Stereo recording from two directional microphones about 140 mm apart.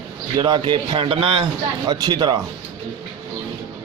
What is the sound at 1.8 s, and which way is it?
Speech, 30° right (ahead or behind).